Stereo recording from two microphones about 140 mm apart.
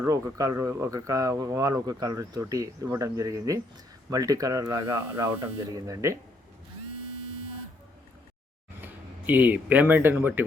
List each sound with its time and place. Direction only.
0.0 s speech: 25° right (ahead or behind)
8.8 s speech: 10° right (ahead or behind)